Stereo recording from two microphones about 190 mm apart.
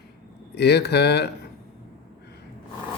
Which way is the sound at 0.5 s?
60° left (ahead or behind).